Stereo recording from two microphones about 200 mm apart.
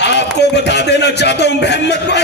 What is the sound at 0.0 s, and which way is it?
A man's voice, 60° left (ahead or behind).